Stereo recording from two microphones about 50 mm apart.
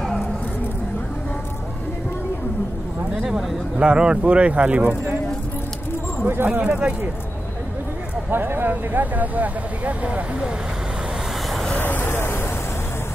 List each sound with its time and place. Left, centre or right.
3.2 s speech: centre; by 4.9 s right
6.2 s speech: right
8.3 s speech: right
11.8 s vehicle: left